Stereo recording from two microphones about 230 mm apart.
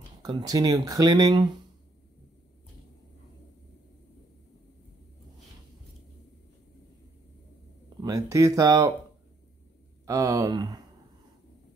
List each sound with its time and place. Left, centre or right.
0.2 s speech: centre
8.0 s speech: centre
10.0 s speech: centre